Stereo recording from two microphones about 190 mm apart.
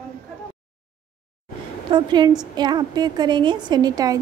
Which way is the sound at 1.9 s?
25° right (ahead or behind).